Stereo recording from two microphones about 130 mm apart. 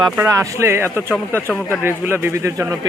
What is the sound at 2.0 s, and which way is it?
Speech, 20° right (ahead or behind).